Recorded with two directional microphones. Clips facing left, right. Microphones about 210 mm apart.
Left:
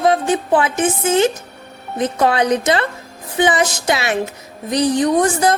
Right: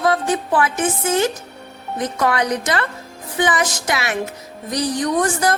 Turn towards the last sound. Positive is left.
turn(degrees=25)  # may be behind; listen again after turning